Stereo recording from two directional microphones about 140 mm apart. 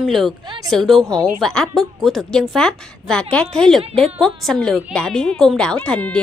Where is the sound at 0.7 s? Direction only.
Centre (ahead or behind).